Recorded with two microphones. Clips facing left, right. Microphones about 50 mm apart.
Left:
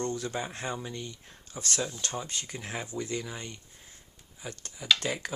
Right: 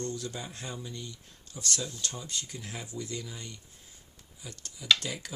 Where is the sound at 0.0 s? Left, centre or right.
Left.